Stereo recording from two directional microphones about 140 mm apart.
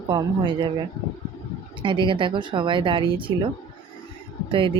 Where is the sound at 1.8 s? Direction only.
35° right (ahead or behind).